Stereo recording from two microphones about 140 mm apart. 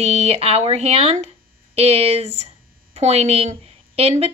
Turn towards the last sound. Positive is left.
turn(degrees=-45)  # may be behind; listen again after turning